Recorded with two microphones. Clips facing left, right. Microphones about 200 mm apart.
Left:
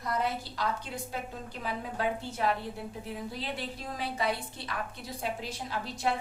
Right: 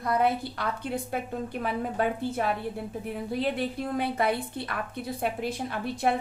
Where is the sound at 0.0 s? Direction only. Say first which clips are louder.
Right 7 dB; 55° right (ahead or behind).